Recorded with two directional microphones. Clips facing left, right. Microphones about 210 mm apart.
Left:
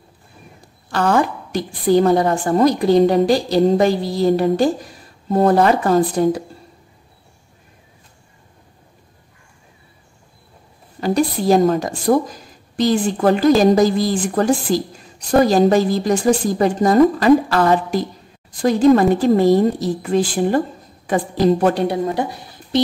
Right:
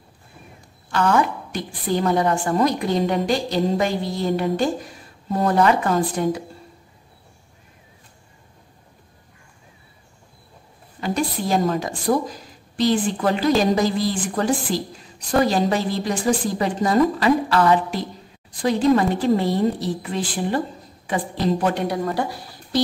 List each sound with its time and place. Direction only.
0.9 s a woman's voice: 35° left (ahead or behind)
11.0 s a woman's voice: 40° left (ahead or behind)
21.7 s speech: 25° left (ahead or behind)